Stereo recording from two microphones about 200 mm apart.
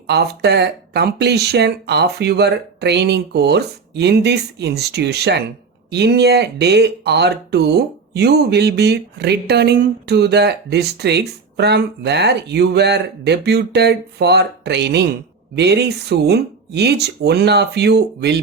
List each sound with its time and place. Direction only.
0.1 s speech: 55° right (ahead or behind)